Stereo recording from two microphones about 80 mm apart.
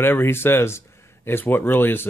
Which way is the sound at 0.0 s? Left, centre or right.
Left.